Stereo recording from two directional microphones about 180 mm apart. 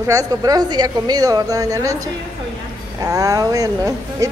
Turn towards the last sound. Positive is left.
turn(degrees=-20)  # may be behind; listen again after turning